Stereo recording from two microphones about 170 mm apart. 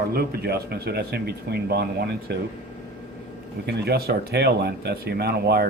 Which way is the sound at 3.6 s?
70° right (ahead or behind).